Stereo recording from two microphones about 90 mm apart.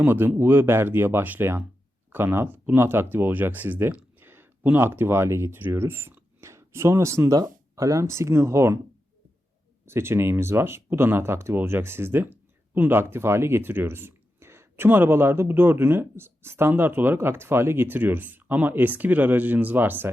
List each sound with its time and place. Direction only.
0.0 s speech: 25° right (ahead or behind)
7.3 s speech: 40° right (ahead or behind)
9.8 s speech: 30° right (ahead or behind)